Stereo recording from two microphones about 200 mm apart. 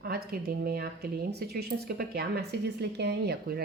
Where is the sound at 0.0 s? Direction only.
50° right (ahead or behind).